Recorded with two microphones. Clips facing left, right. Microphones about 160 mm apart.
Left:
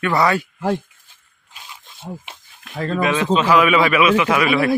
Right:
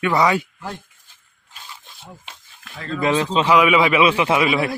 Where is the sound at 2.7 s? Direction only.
45° left (ahead or behind).